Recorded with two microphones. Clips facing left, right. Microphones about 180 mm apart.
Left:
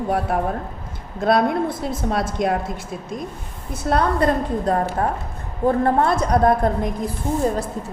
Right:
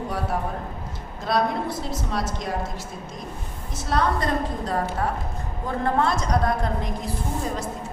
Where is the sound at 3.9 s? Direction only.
50° left (ahead or behind).